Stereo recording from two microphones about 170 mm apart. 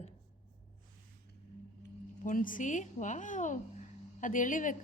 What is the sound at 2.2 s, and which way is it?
A woman's voice, 50° left (ahead or behind).